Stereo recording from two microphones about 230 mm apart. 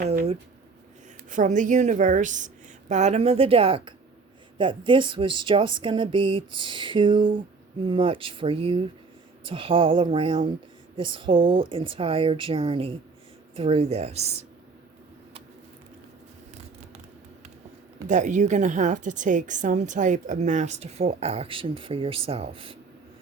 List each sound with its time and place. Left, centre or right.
0.1 s a woman's voice: right
18.1 s a woman's voice: right